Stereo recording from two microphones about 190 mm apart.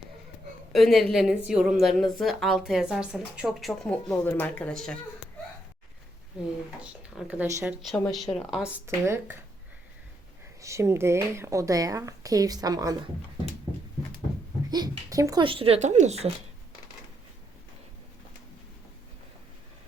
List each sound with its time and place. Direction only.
0.7 s a woman's voice: centre (ahead or behind)
6.8 s a woman's voice: 5° right (ahead or behind)
10.6 s a woman's voice: 15° right (ahead or behind)
14.7 s speech: 20° right (ahead or behind); by 16.3 s 35° right (ahead or behind)